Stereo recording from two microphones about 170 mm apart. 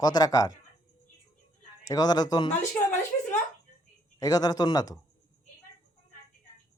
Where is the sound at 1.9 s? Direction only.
25° left (ahead or behind).